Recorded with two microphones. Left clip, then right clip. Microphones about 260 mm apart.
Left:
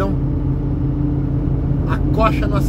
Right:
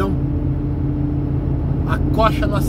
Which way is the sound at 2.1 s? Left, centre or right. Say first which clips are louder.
Even; centre.